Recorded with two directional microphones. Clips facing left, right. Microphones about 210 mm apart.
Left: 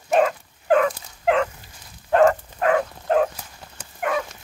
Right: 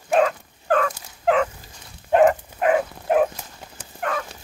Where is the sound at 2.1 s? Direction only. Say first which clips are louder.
Even; 15° right (ahead or behind).